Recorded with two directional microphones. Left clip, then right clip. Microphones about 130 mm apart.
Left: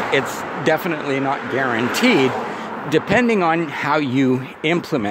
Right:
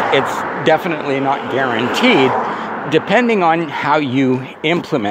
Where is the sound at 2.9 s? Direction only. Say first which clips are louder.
Right 3 dB; 40° left (ahead or behind).